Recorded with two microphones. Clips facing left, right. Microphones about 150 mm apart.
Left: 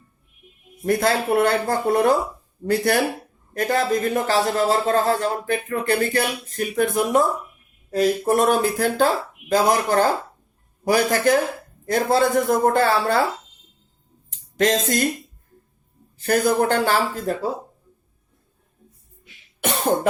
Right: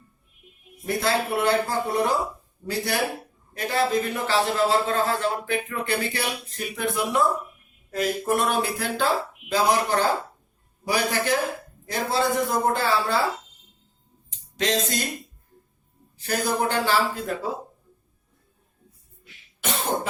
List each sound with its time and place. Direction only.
0.9 s a man's voice: 50° left (ahead or behind)
7.9 s a man's voice: 35° left (ahead or behind); by 13.2 s 50° left (ahead or behind)
14.5 s a man's voice: 50° left (ahead or behind)
16.1 s a man's voice: 55° left (ahead or behind)